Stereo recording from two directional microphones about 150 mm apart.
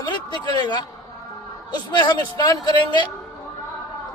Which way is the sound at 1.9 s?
30° left (ahead or behind).